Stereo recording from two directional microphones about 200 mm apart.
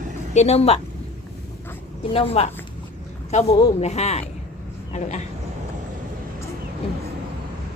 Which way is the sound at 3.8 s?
35° left (ahead or behind).